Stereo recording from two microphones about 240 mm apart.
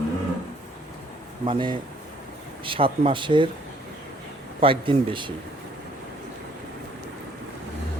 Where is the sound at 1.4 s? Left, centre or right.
Right.